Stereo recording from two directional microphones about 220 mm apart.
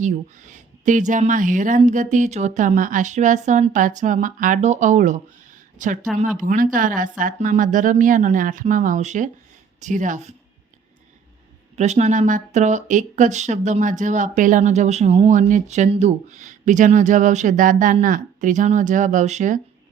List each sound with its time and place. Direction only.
0.0 s speech: 35° right (ahead or behind)
11.8 s speech: 30° right (ahead or behind)